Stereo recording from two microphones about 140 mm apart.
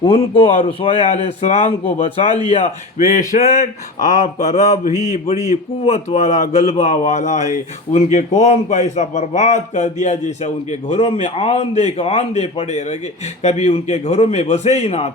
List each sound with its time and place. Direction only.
0.0 s a man's voice: 40° left (ahead or behind)
4.9 s mantra: 25° right (ahead or behind)
5.5 s a man's voice: 45° left (ahead or behind)